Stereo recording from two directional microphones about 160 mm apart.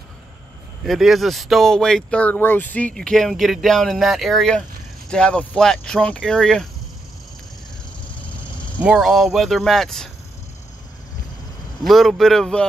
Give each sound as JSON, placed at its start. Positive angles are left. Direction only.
{"t": 0.8, "sound": "speech", "side_deg": 0}
{"t": 8.0, "sound": "a sound", "side_deg": 5}
{"t": 8.8, "sound": "speech", "side_deg": -5}
{"t": 11.8, "sound": "speech", "side_deg": 0}